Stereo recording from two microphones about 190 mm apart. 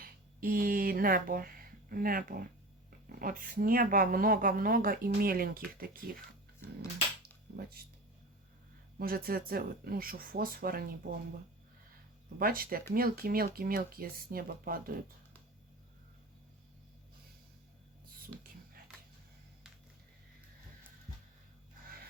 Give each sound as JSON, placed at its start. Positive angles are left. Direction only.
{"t": 0.0, "sound": "speech", "side_deg": -50}
{"t": 7.2, "sound": "a sound", "side_deg": -55}
{"t": 9.0, "sound": "speech", "side_deg": -50}
{"t": 12.4, "sound": "speech", "side_deg": -50}